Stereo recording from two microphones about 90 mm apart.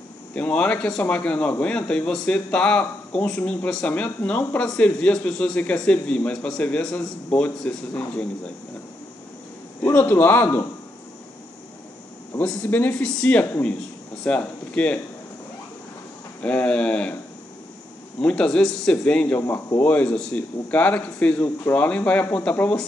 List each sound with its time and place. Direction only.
0.3 s speech: 15° left (ahead or behind)
9.9 s a man's voice: 20° left (ahead or behind)
12.6 s a man's voice: 25° left (ahead or behind)
13.0 s speech: 10° left (ahead or behind)
16.4 s speech: 15° left (ahead or behind)
18.2 s speech: 10° left (ahead or behind)